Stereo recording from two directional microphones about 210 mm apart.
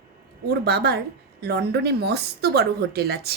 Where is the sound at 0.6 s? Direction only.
50° right (ahead or behind).